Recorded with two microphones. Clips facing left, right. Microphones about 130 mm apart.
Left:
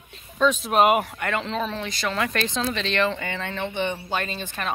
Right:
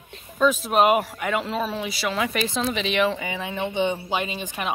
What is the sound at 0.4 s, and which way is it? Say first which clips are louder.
Speech: even; centre (ahead or behind).